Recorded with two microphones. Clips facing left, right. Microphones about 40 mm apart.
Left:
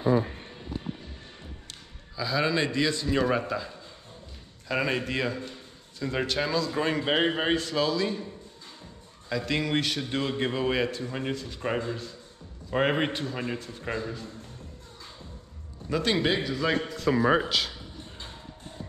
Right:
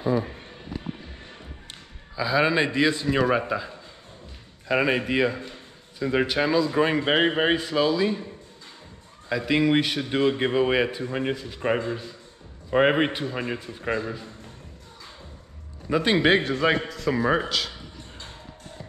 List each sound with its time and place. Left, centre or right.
2.1 s a man's voice: right
9.3 s a man's voice: centre
15.9 s a man's voice: right
16.3 s a man's voice: right
16.6 s a man's voice: right
17.1 s a man's voice: centre